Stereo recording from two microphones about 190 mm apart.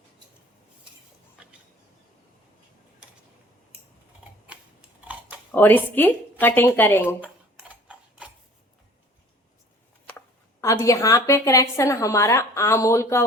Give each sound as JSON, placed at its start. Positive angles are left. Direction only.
{"t": 5.5, "sound": "speech", "side_deg": 10}
{"t": 7.7, "sound": "tick-tock", "side_deg": -5}
{"t": 10.1, "sound": "speech", "side_deg": 15}